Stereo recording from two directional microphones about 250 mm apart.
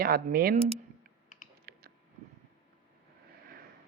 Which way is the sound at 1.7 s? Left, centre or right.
Right.